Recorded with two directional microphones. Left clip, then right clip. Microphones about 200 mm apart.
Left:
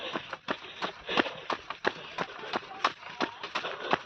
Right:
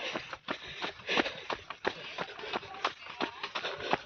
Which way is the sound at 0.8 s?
60° left (ahead or behind).